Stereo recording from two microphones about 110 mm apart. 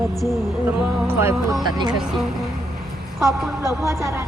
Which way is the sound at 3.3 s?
25° right (ahead or behind).